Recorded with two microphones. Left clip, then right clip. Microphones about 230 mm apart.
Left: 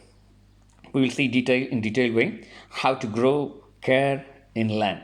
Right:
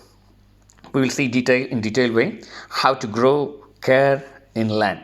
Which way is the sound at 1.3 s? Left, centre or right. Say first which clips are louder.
Right 4 dB; centre.